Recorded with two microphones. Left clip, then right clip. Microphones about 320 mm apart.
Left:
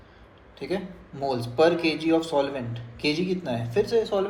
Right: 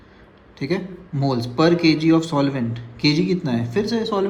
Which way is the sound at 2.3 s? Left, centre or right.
Right.